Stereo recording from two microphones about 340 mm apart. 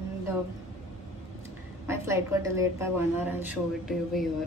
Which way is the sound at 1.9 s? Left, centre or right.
Centre.